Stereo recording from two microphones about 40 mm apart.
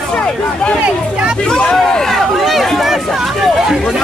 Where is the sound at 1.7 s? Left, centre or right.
Centre.